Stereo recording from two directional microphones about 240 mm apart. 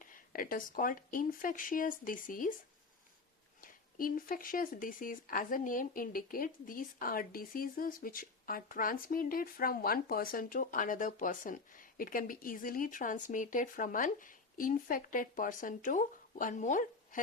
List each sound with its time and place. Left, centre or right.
0.1 s speech: left
3.6 s speech: left